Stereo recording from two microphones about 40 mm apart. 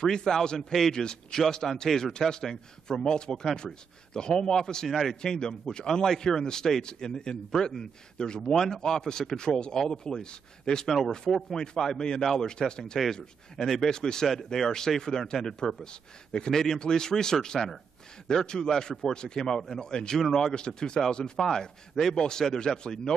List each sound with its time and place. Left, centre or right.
0.0 s a man's voice: centre
1.9 s a man's voice: centre
14.2 s speech: centre
15.0 s a man's voice: centre
20.5 s a man's voice: centre